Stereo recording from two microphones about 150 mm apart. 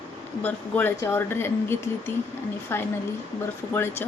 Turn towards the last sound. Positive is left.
turn(degrees=15)  # may be behind; listen again after turning